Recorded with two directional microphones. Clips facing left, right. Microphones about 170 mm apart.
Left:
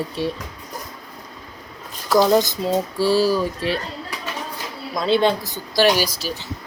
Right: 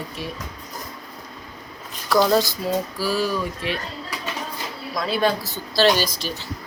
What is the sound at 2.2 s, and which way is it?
Speech, 20° left (ahead or behind).